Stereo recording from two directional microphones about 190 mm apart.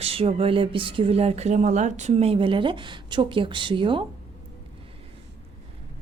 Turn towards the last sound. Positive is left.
turn(degrees=-25)  # may be behind; listen again after turning